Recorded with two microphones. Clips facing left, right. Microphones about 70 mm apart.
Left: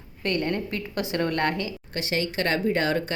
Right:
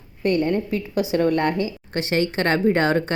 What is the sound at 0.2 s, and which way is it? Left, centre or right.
A woman's voice, centre.